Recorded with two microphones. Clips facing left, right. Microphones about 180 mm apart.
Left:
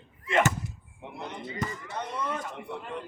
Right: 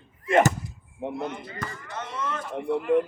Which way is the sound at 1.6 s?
15° left (ahead or behind).